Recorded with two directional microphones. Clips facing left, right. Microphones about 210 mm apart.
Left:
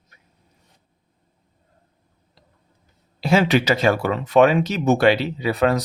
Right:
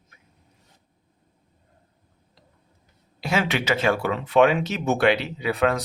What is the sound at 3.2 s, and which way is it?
Speech, 30° left (ahead or behind).